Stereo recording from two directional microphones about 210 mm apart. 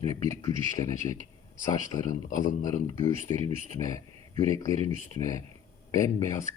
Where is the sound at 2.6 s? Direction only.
15° left (ahead or behind).